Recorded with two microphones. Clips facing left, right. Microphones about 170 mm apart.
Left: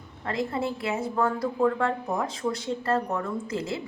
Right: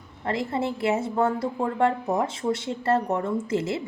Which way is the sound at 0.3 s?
30° right (ahead or behind).